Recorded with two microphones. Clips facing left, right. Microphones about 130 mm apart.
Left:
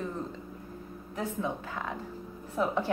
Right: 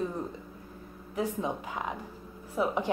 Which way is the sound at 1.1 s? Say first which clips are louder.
Right 2 dB; 15° right (ahead or behind).